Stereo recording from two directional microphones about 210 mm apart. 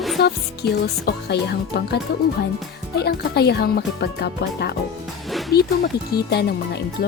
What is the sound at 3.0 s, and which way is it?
Speech, 50° left (ahead or behind).